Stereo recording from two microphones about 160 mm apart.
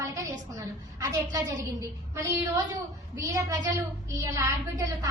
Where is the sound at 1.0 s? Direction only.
25° right (ahead or behind).